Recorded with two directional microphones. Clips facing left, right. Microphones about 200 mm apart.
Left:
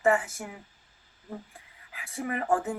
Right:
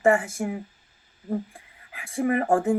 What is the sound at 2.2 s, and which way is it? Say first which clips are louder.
Speech: right 6 dB; 50° right (ahead or behind).